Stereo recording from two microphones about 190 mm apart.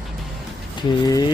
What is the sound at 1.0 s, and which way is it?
Speech, 20° left (ahead or behind).